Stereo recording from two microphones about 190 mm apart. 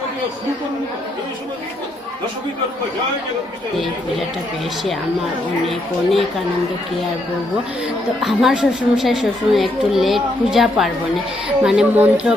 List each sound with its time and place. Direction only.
5.6 s a child's voice: centre (ahead or behind)
8.2 s a child's voice: centre (ahead or behind)